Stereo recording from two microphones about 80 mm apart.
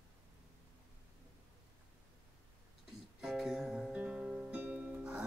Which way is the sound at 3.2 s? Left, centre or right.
Centre.